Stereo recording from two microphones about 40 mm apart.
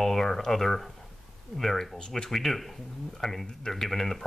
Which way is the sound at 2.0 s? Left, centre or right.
Left.